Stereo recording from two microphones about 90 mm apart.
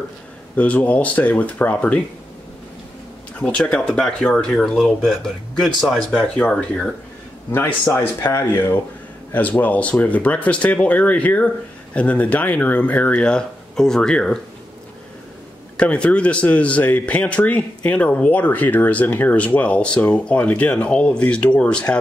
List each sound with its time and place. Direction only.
0.6 s speech: 15° left (ahead or behind)
3.3 s speech: 15° left (ahead or behind)
7.9 s speech: 25° left (ahead or behind); by 14.4 s 10° left (ahead or behind)
15.8 s speech: 15° left (ahead or behind)